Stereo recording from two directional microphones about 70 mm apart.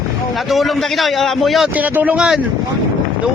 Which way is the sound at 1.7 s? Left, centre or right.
Right.